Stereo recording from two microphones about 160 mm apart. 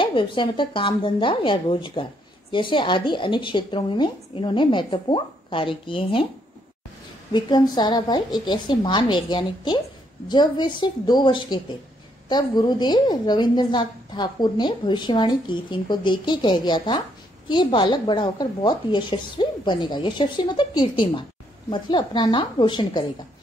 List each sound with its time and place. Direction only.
0.0 s a woman's voice: 30° left (ahead or behind)
7.3 s a woman's voice: 25° left (ahead or behind)